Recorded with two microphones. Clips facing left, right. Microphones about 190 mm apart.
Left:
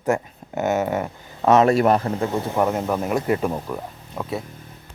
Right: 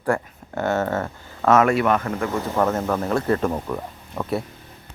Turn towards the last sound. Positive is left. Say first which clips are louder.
# right 3 dB
turn(degrees=0)  # may be behind; listen again after turning